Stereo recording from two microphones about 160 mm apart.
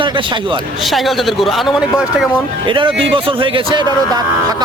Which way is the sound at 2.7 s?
30° right (ahead or behind).